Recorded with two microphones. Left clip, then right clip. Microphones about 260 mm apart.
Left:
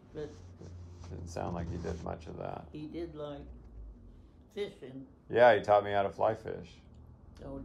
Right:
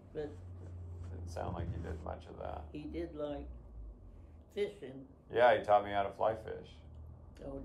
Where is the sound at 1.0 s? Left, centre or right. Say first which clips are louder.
Left 3 dB; left.